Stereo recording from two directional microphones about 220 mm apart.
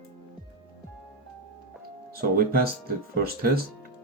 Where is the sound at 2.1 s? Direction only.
45° right (ahead or behind).